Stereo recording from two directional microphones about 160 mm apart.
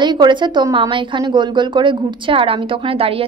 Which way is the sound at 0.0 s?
30° right (ahead or behind).